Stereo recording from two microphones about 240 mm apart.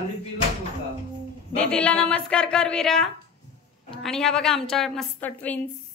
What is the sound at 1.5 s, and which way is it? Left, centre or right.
A woman's voice, centre.